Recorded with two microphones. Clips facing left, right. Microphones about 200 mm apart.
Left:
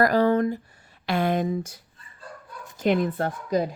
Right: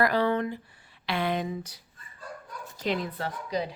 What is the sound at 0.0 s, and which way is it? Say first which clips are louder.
A woman's voice: left 5 dB; 40° left (ahead or behind).